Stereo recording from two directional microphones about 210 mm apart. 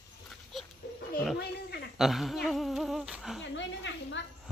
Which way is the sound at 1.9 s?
Centre (ahead or behind).